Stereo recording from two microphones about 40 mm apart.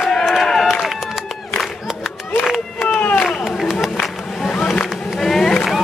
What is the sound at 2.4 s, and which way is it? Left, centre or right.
Run, centre.